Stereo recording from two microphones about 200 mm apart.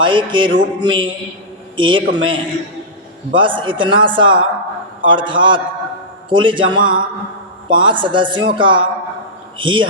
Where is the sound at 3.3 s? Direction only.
25° right (ahead or behind).